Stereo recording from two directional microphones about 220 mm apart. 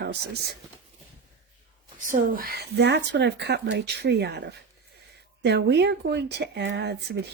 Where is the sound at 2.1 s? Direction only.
40° right (ahead or behind).